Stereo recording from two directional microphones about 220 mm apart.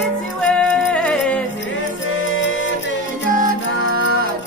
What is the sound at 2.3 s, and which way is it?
Music, 60° left (ahead or behind).